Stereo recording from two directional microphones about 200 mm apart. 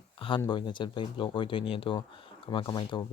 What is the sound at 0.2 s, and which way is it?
Speech, 25° left (ahead or behind).